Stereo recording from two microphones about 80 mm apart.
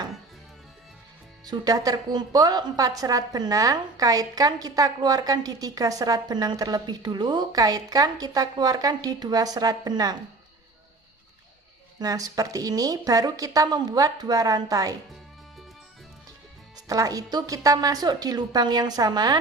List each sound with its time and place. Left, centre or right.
1.5 s a woman's voice: right
11.9 s a woman's voice: right
16.7 s a woman's voice: right